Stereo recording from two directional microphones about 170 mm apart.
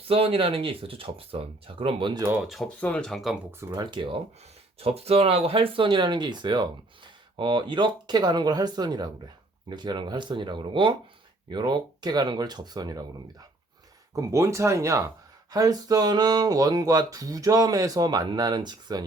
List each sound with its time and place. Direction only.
0.1 s speech: 35° right (ahead or behind)
2.2 s speech: 5° right (ahead or behind)
3.6 s speech: 15° right (ahead or behind)
3.9 s speech: 30° right (ahead or behind)
14.2 s speech: 20° right (ahead or behind)